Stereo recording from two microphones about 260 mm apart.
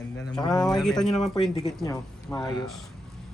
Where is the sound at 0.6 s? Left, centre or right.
Centre.